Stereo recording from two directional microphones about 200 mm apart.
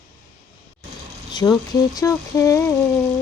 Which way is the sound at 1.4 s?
15° left (ahead or behind).